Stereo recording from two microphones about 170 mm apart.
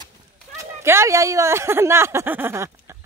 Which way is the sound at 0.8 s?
15° right (ahead or behind).